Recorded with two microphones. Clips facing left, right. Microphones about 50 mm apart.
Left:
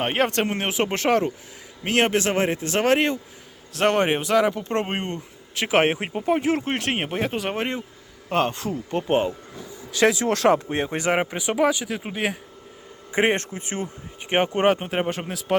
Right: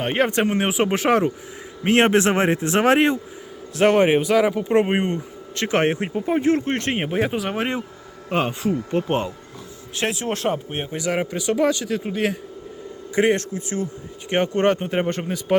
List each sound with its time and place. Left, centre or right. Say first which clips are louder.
0.2 s speech: right 5 dB; centre
1.9 s a man's voice: right 4 dB; right
3.8 s speech: right 4 dB; centre
5.5 s speech: even; centre
9.9 s speech: left 5 dB; left
11.1 s speech: right 3 dB; left; by 12.4 s centre
13.1 s speech: right 2 dB; left
14.3 s speech: right 1 dB; left